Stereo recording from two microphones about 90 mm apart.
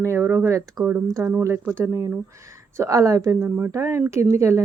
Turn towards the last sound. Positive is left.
turn(degrees=-30)  # may be behind; listen again after turning